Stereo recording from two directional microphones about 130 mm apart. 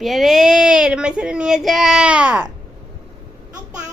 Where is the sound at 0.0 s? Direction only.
Centre (ahead or behind).